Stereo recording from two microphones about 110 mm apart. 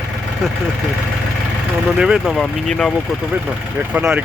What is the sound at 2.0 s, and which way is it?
Speech, 5° right (ahead or behind).